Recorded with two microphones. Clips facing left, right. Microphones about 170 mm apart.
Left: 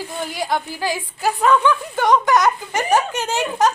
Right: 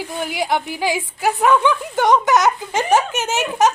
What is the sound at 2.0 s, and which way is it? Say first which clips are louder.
A woman's voice: right 1 dB; 20° right (ahead or behind).